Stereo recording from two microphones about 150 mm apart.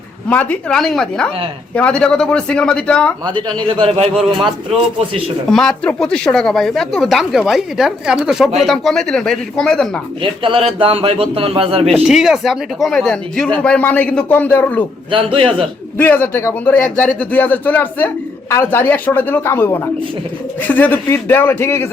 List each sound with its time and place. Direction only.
0.3 s speech: 10° left (ahead or behind)
3.4 s speech: 35° right (ahead or behind)
5.5 s speech: 5° left (ahead or behind)
10.2 s speech: 35° right (ahead or behind)
12.0 s speech: 5° right (ahead or behind)
15.1 s speech: 35° right (ahead or behind)
16.0 s speech: 10° left (ahead or behind)